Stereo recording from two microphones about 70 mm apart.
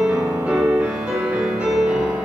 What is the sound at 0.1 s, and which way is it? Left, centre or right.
Music, right.